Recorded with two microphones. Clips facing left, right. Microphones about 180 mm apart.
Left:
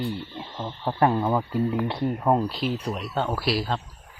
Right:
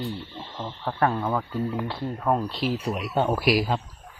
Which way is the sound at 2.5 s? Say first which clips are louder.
Right 1 dB; centre (ahead or behind).